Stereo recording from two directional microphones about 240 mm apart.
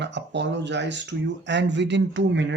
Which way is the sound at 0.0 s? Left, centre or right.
Right.